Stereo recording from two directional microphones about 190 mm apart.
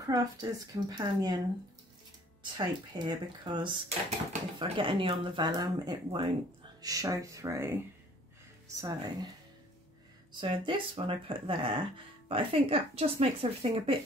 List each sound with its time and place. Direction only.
0.0 s speech: 20° right (ahead or behind)
2.5 s speech: 25° right (ahead or behind)
8.8 s speech: 20° right (ahead or behind)
10.4 s speech: 25° right (ahead or behind)